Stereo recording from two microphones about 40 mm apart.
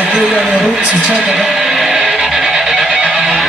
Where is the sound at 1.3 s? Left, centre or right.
Centre.